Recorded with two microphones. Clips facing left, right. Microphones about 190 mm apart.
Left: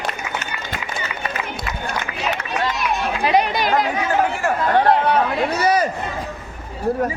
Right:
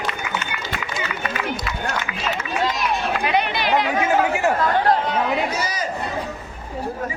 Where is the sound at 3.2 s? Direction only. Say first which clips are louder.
Left 7 dB; 40° left (ahead or behind).